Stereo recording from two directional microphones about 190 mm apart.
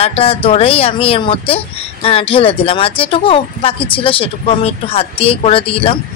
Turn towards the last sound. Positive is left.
turn(degrees=30)  # may be behind; listen again after turning